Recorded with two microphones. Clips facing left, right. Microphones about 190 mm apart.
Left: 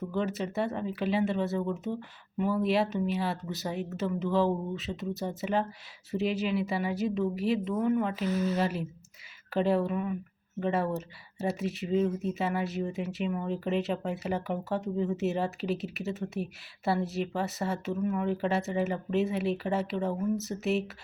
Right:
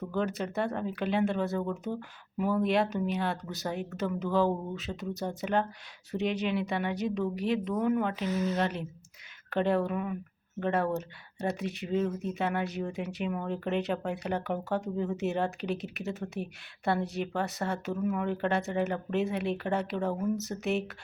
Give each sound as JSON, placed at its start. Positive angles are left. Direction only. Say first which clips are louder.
{"t": 0.1, "sound": "speech", "louder": "right 1 dB", "side_deg": 0}